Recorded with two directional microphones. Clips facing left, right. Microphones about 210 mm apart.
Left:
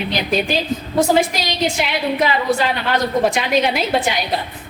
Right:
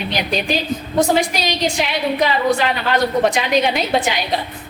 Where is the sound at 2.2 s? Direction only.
Centre (ahead or behind).